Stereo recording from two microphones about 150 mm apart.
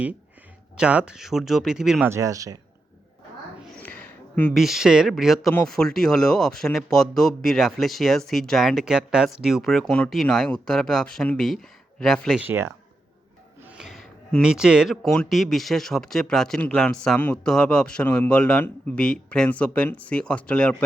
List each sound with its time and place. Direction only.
0.8 s speech: 5° right (ahead or behind)
2.0 s speech: 20° right (ahead or behind)
3.8 s a sound: 10° left (ahead or behind)
4.5 s speech: centre (ahead or behind)
12.4 s speech: 15° right (ahead or behind)
13.6 s speech: 5° right (ahead or behind)